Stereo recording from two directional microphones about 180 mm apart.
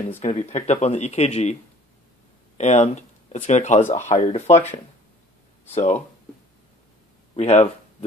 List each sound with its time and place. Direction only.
0.2 s speech: 40° left (ahead or behind)
7.3 s speech: 35° left (ahead or behind)